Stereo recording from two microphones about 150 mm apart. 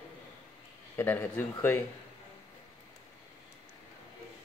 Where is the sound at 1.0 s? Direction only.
15° left (ahead or behind).